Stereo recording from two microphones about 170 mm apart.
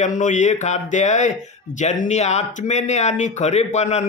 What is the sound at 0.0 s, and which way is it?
Speech, 45° left (ahead or behind).